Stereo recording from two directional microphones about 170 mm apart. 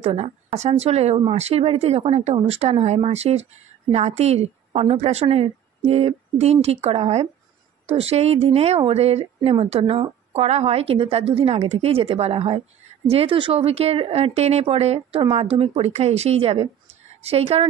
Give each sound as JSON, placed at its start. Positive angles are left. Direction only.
{"t": 0.0, "sound": "speech", "side_deg": -40}